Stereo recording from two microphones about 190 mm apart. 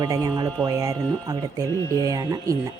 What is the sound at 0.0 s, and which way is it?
Speech, 20° right (ahead or behind).